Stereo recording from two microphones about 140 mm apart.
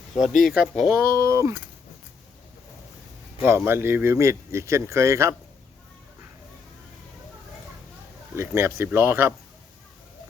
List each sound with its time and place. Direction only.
0.2 s speech: centre (ahead or behind)
0.9 s speech: 20° right (ahead or behind)
3.4 s speech: 15° right (ahead or behind)
8.4 s speech: 20° right (ahead or behind)